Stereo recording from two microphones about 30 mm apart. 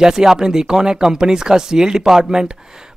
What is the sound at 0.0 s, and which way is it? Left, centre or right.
Speech, centre.